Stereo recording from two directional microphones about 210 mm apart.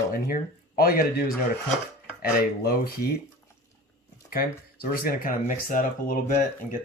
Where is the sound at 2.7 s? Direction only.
45° left (ahead or behind).